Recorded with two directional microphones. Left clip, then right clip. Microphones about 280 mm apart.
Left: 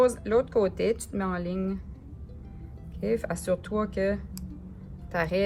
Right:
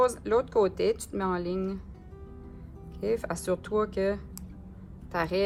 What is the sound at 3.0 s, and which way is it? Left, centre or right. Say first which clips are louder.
Speech: left 1 dB; centre.